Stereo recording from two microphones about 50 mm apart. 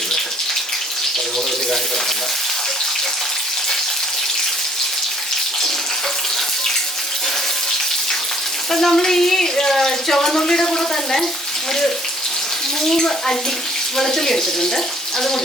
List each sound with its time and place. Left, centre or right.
8.7 s speech: centre
12.9 s speech: centre